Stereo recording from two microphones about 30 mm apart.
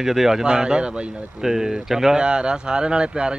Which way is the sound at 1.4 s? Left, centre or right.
Centre.